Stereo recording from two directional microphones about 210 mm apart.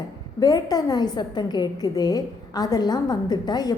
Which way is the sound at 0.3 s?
20° left (ahead or behind).